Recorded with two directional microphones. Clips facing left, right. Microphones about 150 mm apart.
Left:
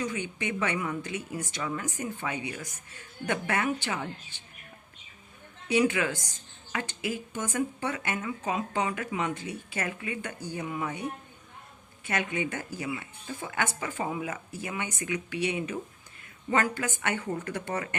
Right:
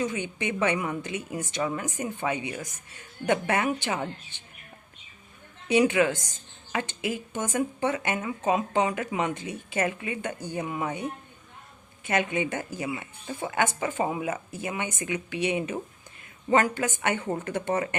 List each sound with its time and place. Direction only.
0.0 s speech: 20° right (ahead or behind)
5.6 s speech: 20° right (ahead or behind)
12.0 s speech: 20° right (ahead or behind)